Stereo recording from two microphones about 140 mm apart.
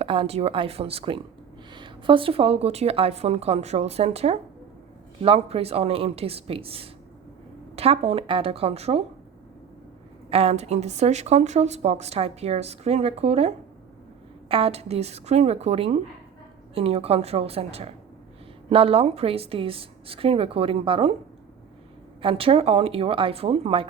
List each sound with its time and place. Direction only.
0.0 s speech: 40° right (ahead or behind)
10.2 s a woman's voice: 45° right (ahead or behind)
22.2 s a woman's voice: 40° right (ahead or behind)